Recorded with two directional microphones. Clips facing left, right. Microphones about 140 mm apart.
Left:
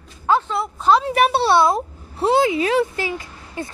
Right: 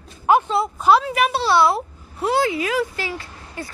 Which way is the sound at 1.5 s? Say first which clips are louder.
Left 1 dB; 20° left (ahead or behind).